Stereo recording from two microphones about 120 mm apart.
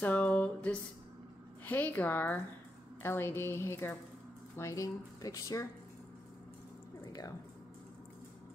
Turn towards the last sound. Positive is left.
turn(degrees=30)  # may be behind; listen again after turning